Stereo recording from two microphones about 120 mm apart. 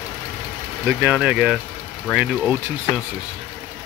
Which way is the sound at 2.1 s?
5° left (ahead or behind).